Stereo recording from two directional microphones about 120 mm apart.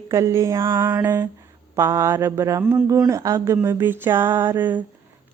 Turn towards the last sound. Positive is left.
turn(degrees=-15)  # may be behind; listen again after turning